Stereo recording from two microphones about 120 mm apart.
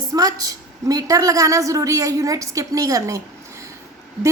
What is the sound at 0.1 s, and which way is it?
A woman's voice, 30° right (ahead or behind).